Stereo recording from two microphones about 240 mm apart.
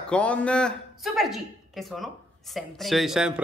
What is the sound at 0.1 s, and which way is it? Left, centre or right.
Speech, centre.